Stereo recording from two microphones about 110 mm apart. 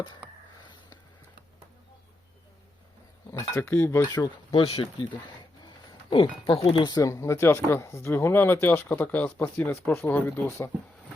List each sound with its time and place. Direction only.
3.3 s speech: 25° left (ahead or behind)
4.0 s speech: 40° left (ahead or behind)
4.5 s speech: 55° left (ahead or behind)
6.1 s speech: 50° left (ahead or behind)
6.8 s speech: 35° left (ahead or behind)